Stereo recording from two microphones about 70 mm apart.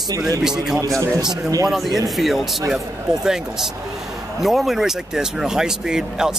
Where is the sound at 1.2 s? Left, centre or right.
Right.